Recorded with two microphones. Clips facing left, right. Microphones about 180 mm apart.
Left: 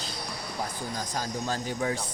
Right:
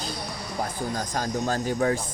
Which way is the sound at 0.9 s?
50° right (ahead or behind).